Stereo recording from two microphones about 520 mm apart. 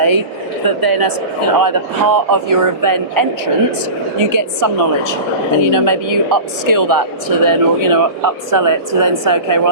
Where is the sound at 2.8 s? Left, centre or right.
Right.